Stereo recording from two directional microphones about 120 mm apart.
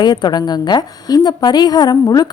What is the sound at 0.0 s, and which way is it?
A woman's voice, 35° left (ahead or behind).